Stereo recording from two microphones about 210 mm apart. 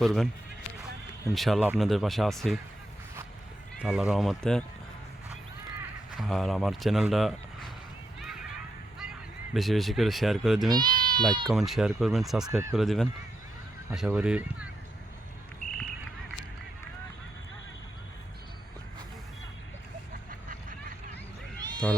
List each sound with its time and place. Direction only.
0.0 s speech: centre (ahead or behind)
1.3 s speech: centre (ahead or behind)
3.8 s speech: 5° right (ahead or behind)
6.1 s speech: centre (ahead or behind)
9.0 s speech: centre (ahead or behind)
10.7 s speech: 20° right (ahead or behind)
11.4 s speech: centre (ahead or behind)
12.5 s speech: 15° right (ahead or behind)
12.7 s speech: centre (ahead or behind)
21.6 s a sound: 20° right (ahead or behind)